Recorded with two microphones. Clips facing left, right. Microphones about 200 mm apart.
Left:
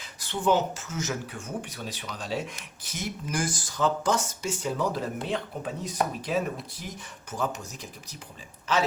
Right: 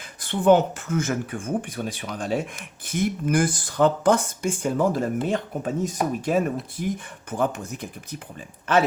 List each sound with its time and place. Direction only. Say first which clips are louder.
0.2 s speech: right 7 dB; 55° right (ahead or behind)